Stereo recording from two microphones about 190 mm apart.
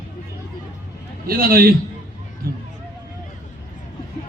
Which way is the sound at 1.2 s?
50° right (ahead or behind).